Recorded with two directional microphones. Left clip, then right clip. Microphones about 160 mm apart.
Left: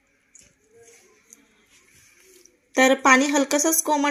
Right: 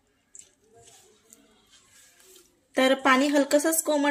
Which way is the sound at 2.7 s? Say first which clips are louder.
Left 5 dB; 45° left (ahead or behind).